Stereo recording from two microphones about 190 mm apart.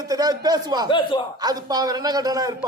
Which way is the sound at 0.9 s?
25° left (ahead or behind).